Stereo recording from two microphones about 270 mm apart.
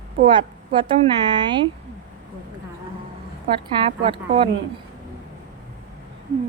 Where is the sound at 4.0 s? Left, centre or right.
Centre.